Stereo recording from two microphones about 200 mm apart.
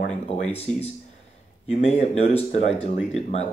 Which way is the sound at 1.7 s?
30° left (ahead or behind).